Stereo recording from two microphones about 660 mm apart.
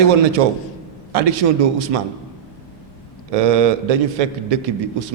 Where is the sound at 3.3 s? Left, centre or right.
Right.